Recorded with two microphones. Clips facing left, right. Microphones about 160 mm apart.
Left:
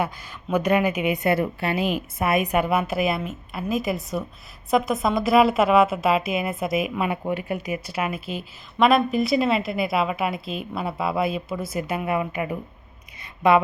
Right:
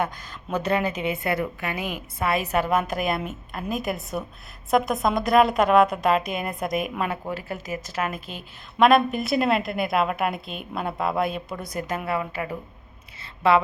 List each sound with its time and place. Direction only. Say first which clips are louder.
0.5 s speech: left 4 dB; 15° left (ahead or behind)
2.4 s a woman's voice: left 1 dB; 15° left (ahead or behind)
7.1 s a woman's voice: left 4 dB; 15° left (ahead or behind)